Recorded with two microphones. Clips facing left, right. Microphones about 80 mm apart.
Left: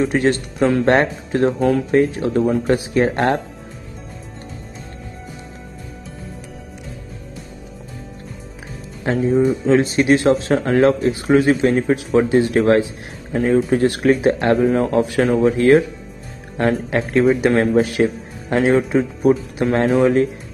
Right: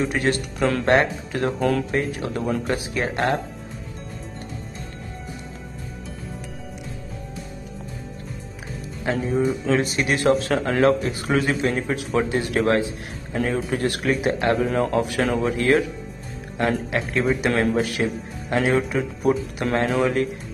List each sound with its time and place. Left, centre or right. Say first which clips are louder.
0.0 s a man's voice: left 5 dB; left
1.6 s speech: left 5 dB; centre
1.9 s speech: left 8 dB; left
9.0 s a man's voice: left 6 dB; left